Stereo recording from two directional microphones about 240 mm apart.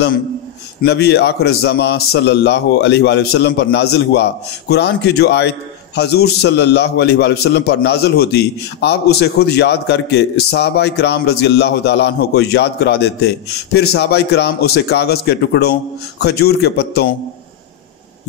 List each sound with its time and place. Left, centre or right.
0.8 s a man's voice: left